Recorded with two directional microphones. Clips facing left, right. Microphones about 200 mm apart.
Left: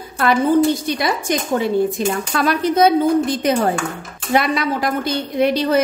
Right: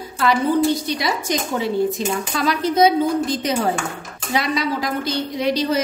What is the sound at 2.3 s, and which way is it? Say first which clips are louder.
A woman's voice: left 2 dB; 55° left (ahead or behind).